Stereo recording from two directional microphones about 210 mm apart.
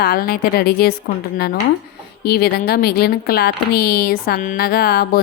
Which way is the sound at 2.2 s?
45° left (ahead or behind).